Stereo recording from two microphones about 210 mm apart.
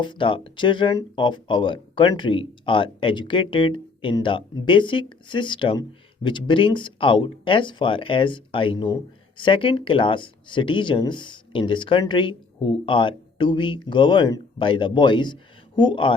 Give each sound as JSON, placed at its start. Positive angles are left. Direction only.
{"t": 0.0, "sound": "speech", "side_deg": 25}